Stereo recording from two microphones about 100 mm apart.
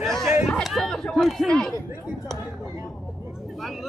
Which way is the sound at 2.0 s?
Centre (ahead or behind).